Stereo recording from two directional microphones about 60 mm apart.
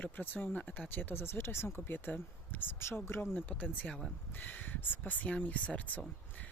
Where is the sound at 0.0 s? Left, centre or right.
Left.